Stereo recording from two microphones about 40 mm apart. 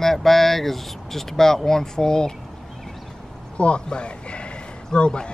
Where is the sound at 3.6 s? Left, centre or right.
Left.